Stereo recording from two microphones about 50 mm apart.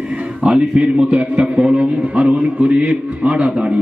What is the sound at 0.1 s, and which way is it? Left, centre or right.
A man's voice, centre.